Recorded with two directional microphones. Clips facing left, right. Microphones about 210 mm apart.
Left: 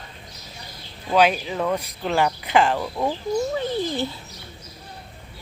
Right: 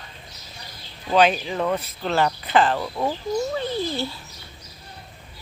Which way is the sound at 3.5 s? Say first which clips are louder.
Left 1 dB; 15° left (ahead or behind).